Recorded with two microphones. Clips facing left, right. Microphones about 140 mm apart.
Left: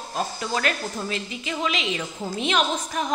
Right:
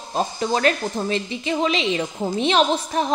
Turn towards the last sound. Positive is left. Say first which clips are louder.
# right 5 dB
turn(degrees=-30)  # may be behind; listen again after turning